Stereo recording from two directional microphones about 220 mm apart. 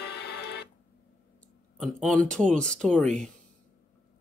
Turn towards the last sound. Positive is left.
turn(degrees=5)  # may be behind; listen again after turning